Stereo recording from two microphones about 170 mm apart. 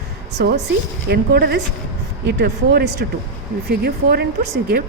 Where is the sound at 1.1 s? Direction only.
70° right (ahead or behind).